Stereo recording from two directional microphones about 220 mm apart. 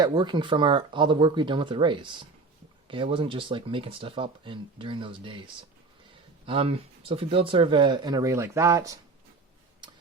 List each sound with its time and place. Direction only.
0.0 s speech: 20° right (ahead or behind)
6.4 s speech: 25° right (ahead or behind)